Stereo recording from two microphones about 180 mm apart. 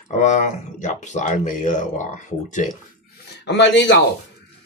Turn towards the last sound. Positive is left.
turn(degrees=75)  # may be behind; listen again after turning